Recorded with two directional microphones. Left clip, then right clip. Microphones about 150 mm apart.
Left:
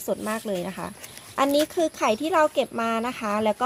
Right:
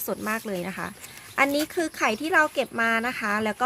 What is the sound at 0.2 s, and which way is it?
Speech, centre (ahead or behind).